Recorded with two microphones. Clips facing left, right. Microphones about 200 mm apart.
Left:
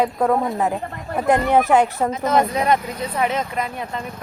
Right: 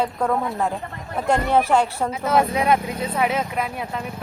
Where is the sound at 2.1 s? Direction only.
5° right (ahead or behind).